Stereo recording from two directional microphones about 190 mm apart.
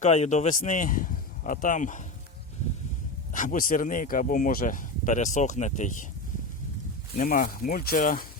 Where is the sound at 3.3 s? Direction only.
45° left (ahead or behind).